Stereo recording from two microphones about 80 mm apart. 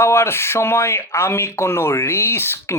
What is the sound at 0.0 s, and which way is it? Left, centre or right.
Speech, left.